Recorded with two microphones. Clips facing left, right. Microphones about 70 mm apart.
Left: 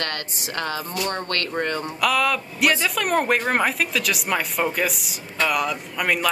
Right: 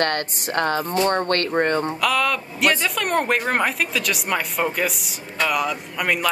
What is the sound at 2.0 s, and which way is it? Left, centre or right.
A man's voice, centre.